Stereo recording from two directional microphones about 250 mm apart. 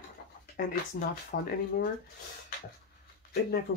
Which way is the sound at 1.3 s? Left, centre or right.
Left.